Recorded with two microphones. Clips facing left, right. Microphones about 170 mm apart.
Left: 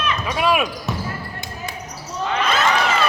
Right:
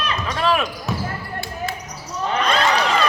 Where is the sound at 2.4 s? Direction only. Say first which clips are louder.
Even; 5° left (ahead or behind).